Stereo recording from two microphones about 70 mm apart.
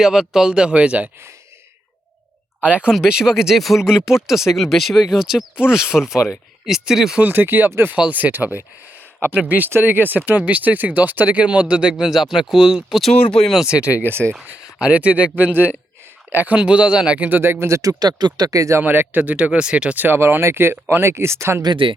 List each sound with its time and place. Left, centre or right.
0.0 s speech: centre
2.6 s speech: centre
2.9 s speech: centre
7.2 s speech: right; by 13.0 s centre
13.3 s speech: centre
13.6 s speech: centre
14.1 s speech: right
14.8 s speech: centre
16.6 s speech: centre; by 17.9 s right
18.0 s speech: right
18.8 s speech: right
20.1 s speech: right